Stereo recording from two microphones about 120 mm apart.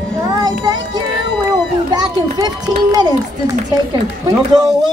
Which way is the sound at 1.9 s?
35° right (ahead or behind).